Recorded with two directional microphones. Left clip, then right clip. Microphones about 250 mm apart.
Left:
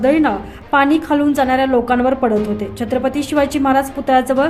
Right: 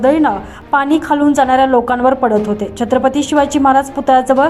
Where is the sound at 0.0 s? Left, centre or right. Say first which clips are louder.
Right 3 dB; centre.